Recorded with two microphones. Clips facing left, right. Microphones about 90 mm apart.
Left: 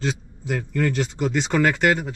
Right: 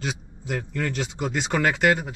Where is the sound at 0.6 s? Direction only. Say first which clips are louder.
Left 6 dB; 10° right (ahead or behind).